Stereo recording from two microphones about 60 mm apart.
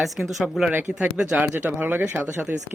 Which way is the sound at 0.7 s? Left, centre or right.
Right.